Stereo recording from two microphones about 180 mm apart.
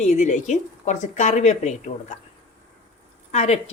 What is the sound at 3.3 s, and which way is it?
Speech, 40° left (ahead or behind).